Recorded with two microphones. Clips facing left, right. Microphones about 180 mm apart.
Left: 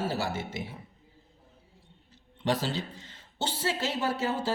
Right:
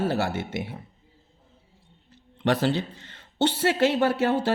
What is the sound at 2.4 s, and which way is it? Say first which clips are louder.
A man's voice: right 6 dB; 65° right (ahead or behind).